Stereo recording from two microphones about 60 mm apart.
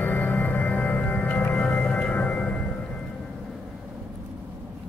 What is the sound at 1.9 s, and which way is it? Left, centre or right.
Singing bowl, left.